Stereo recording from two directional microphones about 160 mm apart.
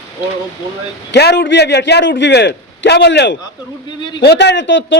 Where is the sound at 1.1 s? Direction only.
90° left.